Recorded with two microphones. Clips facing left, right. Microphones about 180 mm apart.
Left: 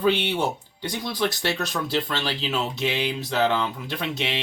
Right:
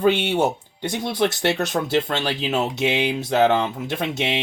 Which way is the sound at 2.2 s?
20° right (ahead or behind).